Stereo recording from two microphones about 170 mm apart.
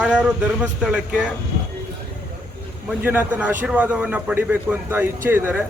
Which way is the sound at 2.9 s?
10° right (ahead or behind).